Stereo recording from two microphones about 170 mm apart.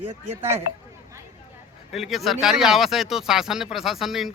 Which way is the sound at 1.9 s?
Centre (ahead or behind).